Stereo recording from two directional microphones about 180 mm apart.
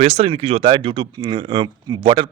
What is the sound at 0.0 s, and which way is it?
Speech, 35° right (ahead or behind).